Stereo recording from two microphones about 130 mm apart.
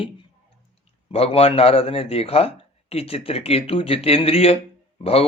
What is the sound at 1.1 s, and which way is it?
A man's voice, 50° left (ahead or behind).